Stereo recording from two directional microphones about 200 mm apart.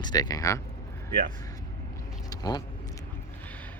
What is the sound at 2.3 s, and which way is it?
Vehicle, 20° left (ahead or behind).